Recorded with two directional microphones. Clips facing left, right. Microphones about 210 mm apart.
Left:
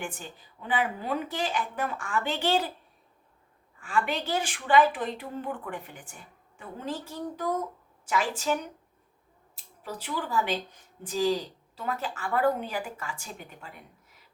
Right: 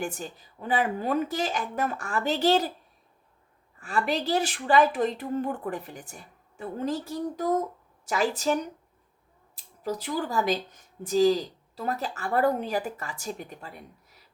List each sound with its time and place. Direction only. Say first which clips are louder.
0.0 s speech: right 5 dB; 40° right (ahead or behind)
3.8 s speech: right 2 dB; 40° right (ahead or behind)
9.8 s speech: right 5 dB; 40° right (ahead or behind)